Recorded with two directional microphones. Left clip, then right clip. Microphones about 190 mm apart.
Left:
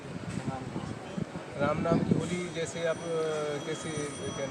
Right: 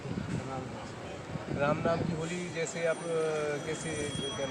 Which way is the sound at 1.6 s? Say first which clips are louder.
Left 1 dB; 5° left (ahead or behind).